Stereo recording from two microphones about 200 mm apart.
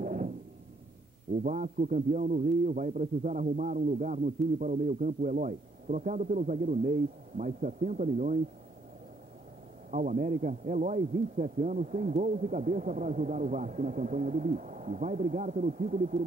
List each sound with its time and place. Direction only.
0.0 s a sound: 40° right (ahead or behind)
1.4 s a man's voice: 40° right (ahead or behind)
9.8 s a man's voice: 40° right (ahead or behind)